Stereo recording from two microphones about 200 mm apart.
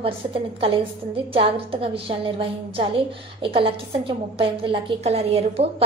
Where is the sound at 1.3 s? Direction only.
30° right (ahead or behind).